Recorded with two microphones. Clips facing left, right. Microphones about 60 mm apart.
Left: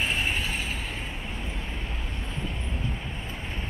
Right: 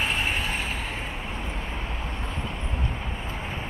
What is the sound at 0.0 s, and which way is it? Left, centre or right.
Vehicle, right.